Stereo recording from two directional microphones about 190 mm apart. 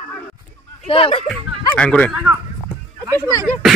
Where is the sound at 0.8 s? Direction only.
30° left (ahead or behind).